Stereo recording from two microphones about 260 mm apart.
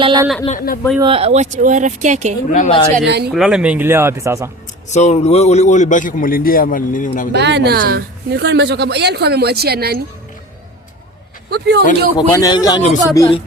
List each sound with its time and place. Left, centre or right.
0.0 s speech: centre
0.4 s speech: left
0.9 s speech: right
2.5 s a man's voice: left
3.1 s a woman's voice: right
3.3 s speech: centre
4.9 s a man's voice: left
7.3 s a woman's voice: right
11.5 s a woman's voice: right
12.1 s a man's voice: centre